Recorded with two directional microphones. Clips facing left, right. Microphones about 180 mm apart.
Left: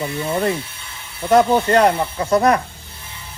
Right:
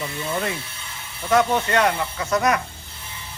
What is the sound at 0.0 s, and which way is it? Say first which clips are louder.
Speech: left 6 dB; 35° left (ahead or behind).